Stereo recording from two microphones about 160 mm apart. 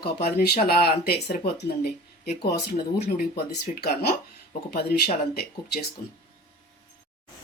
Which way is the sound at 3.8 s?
80° left.